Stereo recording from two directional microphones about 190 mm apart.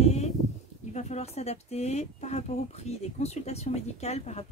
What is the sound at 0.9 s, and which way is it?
Speech, 35° left (ahead or behind).